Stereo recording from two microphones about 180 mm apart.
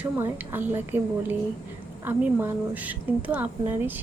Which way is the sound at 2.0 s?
10° right (ahead or behind).